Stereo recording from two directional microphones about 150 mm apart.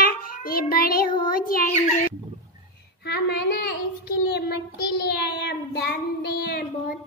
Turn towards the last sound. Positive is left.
turn(degrees=90)